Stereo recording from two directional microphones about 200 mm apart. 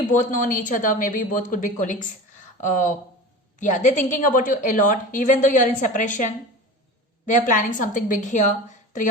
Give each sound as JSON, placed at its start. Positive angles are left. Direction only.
{"t": 0.3, "sound": "a woman's voice", "side_deg": 40}
{"t": 7.3, "sound": "a woman's voice", "side_deg": 40}